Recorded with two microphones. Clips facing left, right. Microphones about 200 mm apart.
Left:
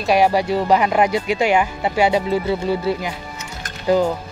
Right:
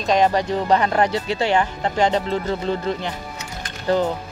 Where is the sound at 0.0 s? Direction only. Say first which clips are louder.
Left 2 dB; 10° left (ahead or behind).